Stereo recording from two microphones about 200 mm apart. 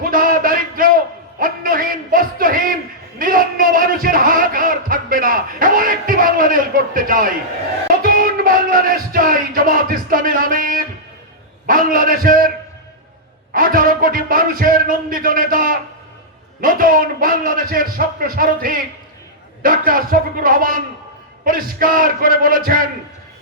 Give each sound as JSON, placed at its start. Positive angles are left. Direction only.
{"t": 0.0, "sound": "a sound", "side_deg": -45}
{"t": 8.0, "sound": "music", "side_deg": -45}
{"t": 11.6, "sound": "a man's voice", "side_deg": -45}
{"t": 13.5, "sound": "a man's voice", "side_deg": -45}